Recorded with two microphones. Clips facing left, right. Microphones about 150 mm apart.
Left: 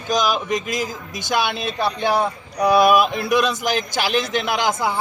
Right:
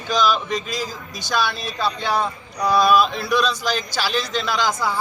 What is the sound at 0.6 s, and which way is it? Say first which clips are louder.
Speech: left 3 dB; 50° left (ahead or behind).